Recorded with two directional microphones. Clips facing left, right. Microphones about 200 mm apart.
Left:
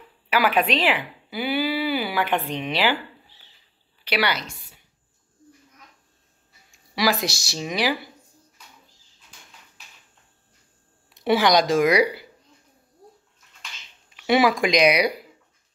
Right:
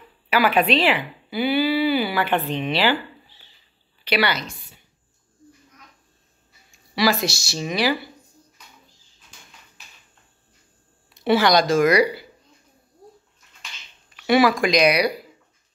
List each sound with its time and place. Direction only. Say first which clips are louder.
0.3 s speech: right 2 dB; 10° left (ahead or behind)
4.0 s a woman's voice: right 2 dB; 10° left (ahead or behind)
7.0 s speech: right 2 dB; 15° left (ahead or behind)
11.1 s speech: right 1 dB; 15° left (ahead or behind)
14.1 s speech: right 2 dB; 20° left (ahead or behind)